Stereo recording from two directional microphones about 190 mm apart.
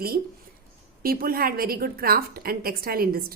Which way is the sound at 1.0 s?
50° right (ahead or behind).